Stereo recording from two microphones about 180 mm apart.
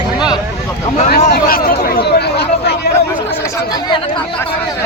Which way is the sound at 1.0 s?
55° left (ahead or behind).